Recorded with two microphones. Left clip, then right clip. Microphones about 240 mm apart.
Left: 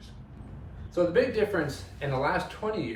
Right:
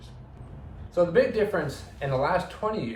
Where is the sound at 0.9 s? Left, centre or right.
Centre.